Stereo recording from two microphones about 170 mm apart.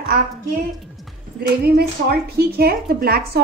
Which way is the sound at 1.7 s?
65° right (ahead or behind).